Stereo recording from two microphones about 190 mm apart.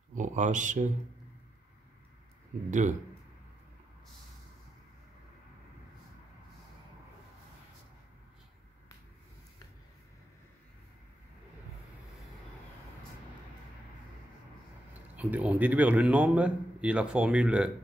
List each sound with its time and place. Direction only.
0.1 s speech: 40° right (ahead or behind)
2.5 s speech: 40° right (ahead or behind)
15.1 s a man's voice: 10° right (ahead or behind)